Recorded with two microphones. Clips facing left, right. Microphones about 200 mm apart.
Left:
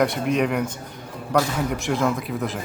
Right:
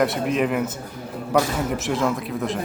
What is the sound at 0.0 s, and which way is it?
Speech, centre (ahead or behind).